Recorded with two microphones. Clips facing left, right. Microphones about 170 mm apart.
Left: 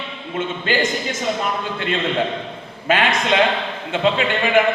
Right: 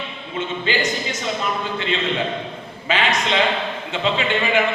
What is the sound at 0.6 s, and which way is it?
Speech, 50° left (ahead or behind).